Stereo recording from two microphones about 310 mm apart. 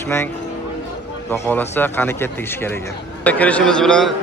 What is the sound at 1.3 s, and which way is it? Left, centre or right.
A man's voice, centre.